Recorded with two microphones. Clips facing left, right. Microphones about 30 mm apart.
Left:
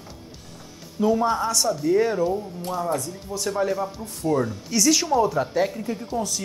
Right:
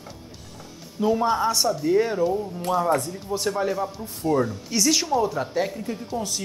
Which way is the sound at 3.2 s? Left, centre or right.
Centre.